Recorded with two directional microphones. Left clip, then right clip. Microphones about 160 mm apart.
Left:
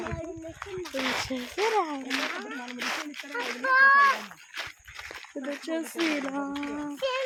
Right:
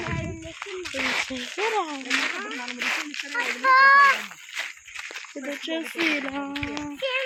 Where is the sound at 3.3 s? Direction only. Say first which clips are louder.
Right 4 dB; 30° left (ahead or behind).